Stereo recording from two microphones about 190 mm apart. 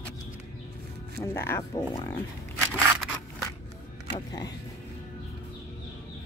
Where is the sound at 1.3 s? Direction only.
15° left (ahead or behind).